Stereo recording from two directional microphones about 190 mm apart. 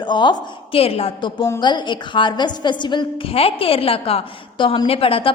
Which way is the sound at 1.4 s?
20° left (ahead or behind).